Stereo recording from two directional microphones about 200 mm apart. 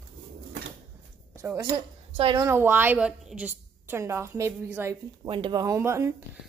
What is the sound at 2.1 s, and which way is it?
Speech, 25° right (ahead or behind).